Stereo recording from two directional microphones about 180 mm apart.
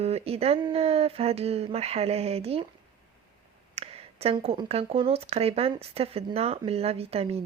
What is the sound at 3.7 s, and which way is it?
A woman's voice, 35° right (ahead or behind).